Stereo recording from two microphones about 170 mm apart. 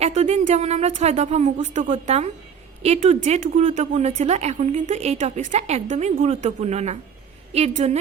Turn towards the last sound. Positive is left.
turn(degrees=-40)  # may be behind; listen again after turning